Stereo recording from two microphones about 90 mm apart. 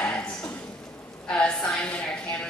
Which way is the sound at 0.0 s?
10° left (ahead or behind).